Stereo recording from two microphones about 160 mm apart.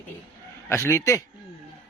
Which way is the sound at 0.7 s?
15° left (ahead or behind).